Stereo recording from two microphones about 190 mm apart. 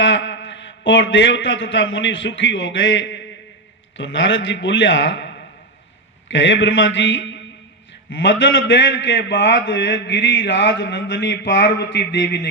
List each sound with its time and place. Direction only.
0.0 s a man's voice: 70° left (ahead or behind)